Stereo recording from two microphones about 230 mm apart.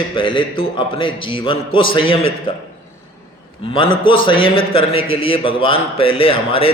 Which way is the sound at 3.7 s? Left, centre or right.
Left.